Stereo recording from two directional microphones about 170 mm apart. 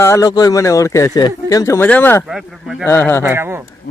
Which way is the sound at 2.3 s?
5° right (ahead or behind).